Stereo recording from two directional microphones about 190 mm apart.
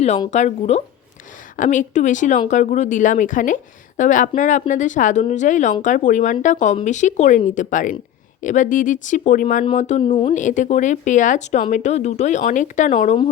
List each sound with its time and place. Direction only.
0.3 s a woman's voice: 40° left (ahead or behind)